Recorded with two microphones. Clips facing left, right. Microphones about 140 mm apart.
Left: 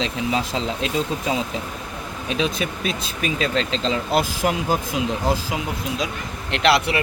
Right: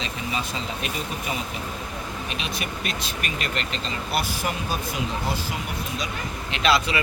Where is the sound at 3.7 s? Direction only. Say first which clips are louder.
Left 7 dB; 90° left.